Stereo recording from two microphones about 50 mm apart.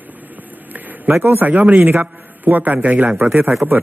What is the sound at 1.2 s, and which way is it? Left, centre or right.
Speech, right.